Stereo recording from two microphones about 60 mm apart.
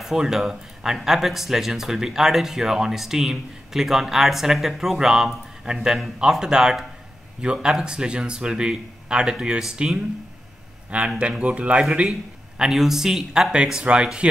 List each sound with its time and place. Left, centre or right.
0.0 s speech: centre
11.1 s speech: centre